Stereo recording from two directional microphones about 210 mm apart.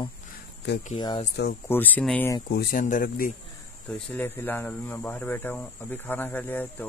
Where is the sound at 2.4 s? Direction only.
45° left (ahead or behind).